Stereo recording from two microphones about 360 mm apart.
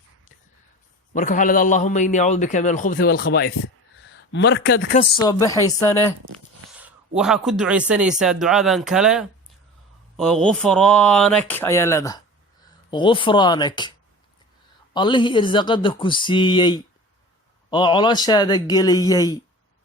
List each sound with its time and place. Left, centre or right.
1.1 s a man's voice: left
5.2 s speech: centre
6.7 s speech: centre
14.9 s speech: centre